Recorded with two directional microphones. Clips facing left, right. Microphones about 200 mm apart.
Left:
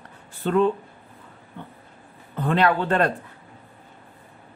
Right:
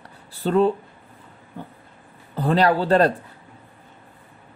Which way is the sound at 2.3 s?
35° right (ahead or behind).